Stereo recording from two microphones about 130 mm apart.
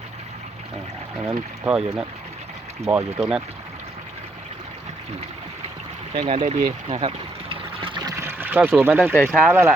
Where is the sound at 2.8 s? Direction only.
20° right (ahead or behind).